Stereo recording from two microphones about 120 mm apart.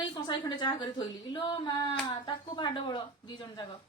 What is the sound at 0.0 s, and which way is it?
A woman's voice, 35° left (ahead or behind).